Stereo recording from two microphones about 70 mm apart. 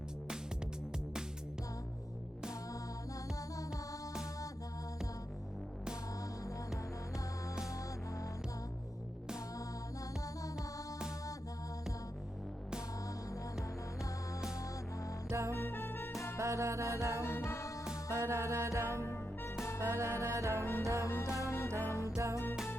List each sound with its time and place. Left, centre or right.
3.7 s music: centre
15.3 s music: right
15.5 s music: left
16.4 s music: right
17.2 s music: left
18.1 s music: right
19.0 s music: left
19.8 s music: right
21.0 s music: left
21.8 s music: left
22.1 s music: right